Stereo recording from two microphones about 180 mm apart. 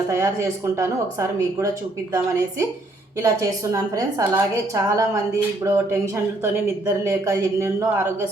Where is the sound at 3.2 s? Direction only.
15° right (ahead or behind).